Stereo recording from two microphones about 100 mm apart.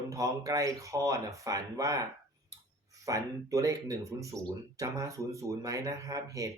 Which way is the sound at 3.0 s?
35° right (ahead or behind).